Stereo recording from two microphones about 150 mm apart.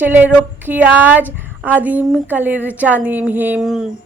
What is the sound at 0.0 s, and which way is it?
A woman's voice, 10° right (ahead or behind).